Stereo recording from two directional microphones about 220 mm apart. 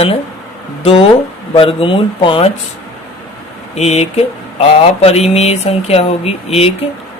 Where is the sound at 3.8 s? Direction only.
30° left (ahead or behind).